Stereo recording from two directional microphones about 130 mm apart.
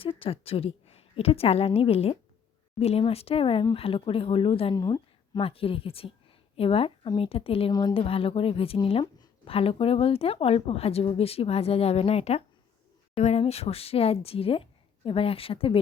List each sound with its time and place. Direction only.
0.0 s a woman's voice: 45° left (ahead or behind)
4.7 s a sound: 30° left (ahead or behind)
5.4 s a woman's voice: 45° left (ahead or behind)
7.7 s a woman's voice: 30° left (ahead or behind)
7.9 s a woman's voice: 45° left (ahead or behind)